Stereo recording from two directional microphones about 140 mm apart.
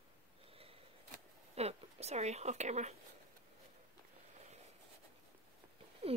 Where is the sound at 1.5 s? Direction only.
50° right (ahead or behind).